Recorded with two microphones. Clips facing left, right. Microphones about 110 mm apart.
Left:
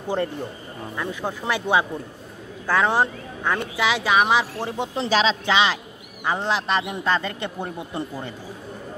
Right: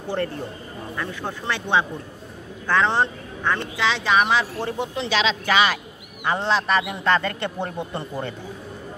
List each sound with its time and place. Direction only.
0.9 s speech: 10° left (ahead or behind)
4.9 s speech: 35° left (ahead or behind)
5.4 s speech: 20° left (ahead or behind)